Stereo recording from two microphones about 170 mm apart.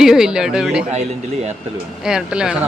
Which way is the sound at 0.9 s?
40° right (ahead or behind).